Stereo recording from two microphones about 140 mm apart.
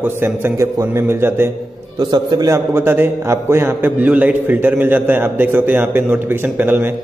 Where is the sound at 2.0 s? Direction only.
30° right (ahead or behind).